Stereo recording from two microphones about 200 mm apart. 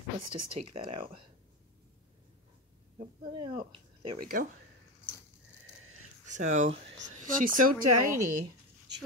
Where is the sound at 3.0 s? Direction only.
25° right (ahead or behind).